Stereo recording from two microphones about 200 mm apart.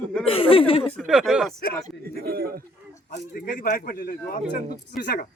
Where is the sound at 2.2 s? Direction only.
50° right (ahead or behind).